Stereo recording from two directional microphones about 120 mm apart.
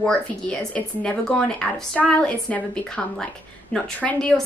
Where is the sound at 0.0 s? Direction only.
5° left (ahead or behind).